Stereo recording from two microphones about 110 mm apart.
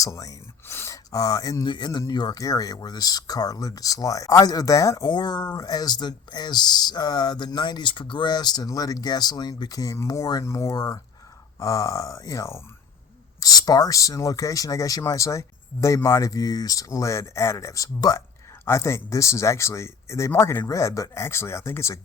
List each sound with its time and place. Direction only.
0.0 s a sound: 30° left (ahead or behind)
1.6 s speech: 45° left (ahead or behind); by 5.0 s 30° left (ahead or behind)
5.0 s speech: 45° left (ahead or behind); by 21.9 s 25° left (ahead or behind)